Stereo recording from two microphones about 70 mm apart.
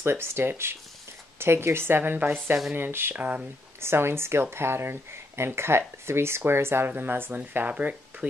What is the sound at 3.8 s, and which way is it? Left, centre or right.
Speech, right.